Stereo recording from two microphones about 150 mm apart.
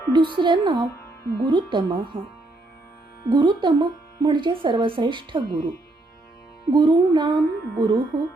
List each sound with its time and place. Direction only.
0.1 s speech: 30° right (ahead or behind)
3.2 s speech: 30° right (ahead or behind)
6.7 s speech: 30° right (ahead or behind)